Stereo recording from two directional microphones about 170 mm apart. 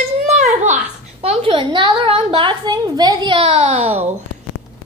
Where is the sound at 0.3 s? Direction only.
45° right (ahead or behind).